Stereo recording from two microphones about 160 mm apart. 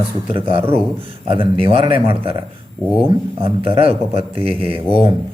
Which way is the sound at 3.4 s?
35° right (ahead or behind).